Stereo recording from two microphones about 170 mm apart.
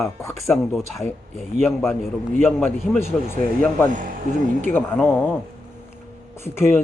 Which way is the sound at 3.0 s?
15° left (ahead or behind).